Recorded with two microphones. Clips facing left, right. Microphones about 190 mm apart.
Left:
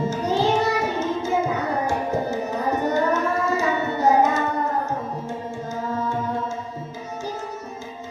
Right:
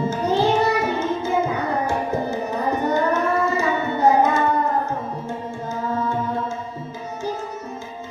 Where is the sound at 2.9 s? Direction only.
55° right (ahead or behind).